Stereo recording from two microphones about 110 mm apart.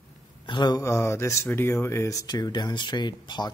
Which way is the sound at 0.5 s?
45° left (ahead or behind).